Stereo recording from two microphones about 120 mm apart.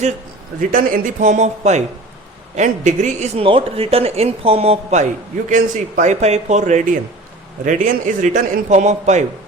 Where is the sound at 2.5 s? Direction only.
90° right.